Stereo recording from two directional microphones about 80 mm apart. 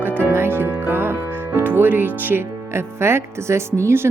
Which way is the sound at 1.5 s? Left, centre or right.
Right.